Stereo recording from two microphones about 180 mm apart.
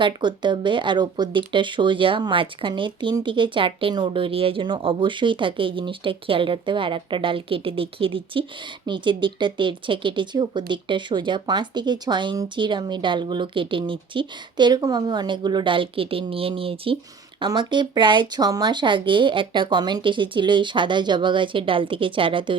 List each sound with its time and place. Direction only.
0.0 s speech: 25° right (ahead or behind)